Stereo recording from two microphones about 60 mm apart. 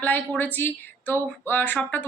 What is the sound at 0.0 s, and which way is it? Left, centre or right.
Speech, left.